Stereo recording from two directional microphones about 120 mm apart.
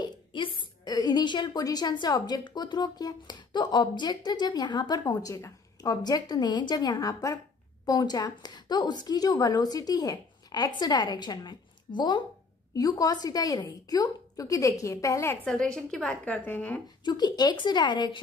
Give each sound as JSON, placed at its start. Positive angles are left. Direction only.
{"t": 0.0, "sound": "a sound", "side_deg": 40}
{"t": 0.6, "sound": "a woman's voice", "side_deg": 35}
{"t": 15.4, "sound": "a woman's voice", "side_deg": 5}
{"t": 17.0, "sound": "a woman's voice", "side_deg": 35}